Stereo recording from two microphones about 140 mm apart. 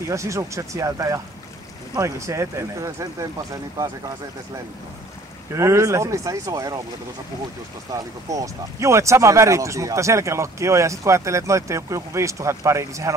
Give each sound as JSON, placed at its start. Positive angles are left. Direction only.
{"t": 0.1, "sound": "speech", "side_deg": -20}
{"t": 5.5, "sound": "speech", "side_deg": -20}
{"t": 7.9, "sound": "speech", "side_deg": -25}